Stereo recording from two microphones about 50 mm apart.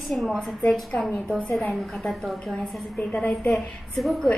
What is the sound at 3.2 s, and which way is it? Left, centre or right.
Speech, left.